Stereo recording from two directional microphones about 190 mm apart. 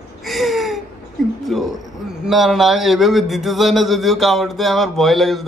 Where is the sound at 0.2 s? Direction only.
Centre (ahead or behind).